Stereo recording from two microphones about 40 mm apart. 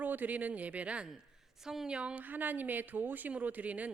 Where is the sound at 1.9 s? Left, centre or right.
Right.